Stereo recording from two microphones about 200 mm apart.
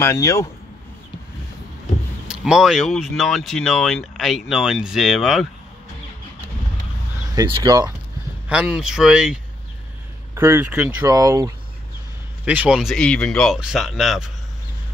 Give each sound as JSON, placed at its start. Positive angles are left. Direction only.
{"t": 0.0, "sound": "speech", "side_deg": 15}
{"t": 2.4, "sound": "speech", "side_deg": 0}
{"t": 7.3, "sound": "speech", "side_deg": -25}
{"t": 8.5, "sound": "speech", "side_deg": -5}
{"t": 12.4, "sound": "speech", "side_deg": -5}